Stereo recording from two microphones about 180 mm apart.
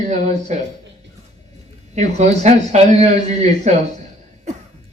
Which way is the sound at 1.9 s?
40° right (ahead or behind).